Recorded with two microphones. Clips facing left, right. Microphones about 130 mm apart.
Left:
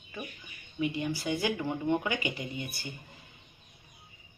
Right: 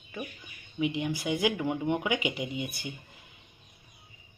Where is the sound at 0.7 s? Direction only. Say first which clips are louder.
Right 2 dB; 20° right (ahead or behind).